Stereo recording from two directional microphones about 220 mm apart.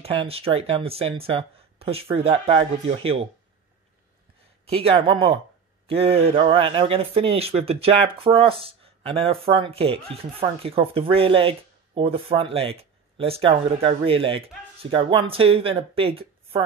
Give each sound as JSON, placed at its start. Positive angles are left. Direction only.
{"t": 0.0, "sound": "speech", "side_deg": -25}
{"t": 4.6, "sound": "speech", "side_deg": -25}